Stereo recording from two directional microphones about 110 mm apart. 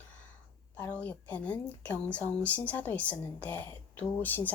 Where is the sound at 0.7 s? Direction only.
15° left (ahead or behind).